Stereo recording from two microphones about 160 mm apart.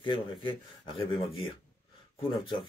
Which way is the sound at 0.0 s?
30° left (ahead or behind).